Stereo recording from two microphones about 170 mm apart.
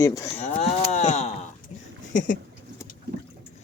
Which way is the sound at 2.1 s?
50° left (ahead or behind).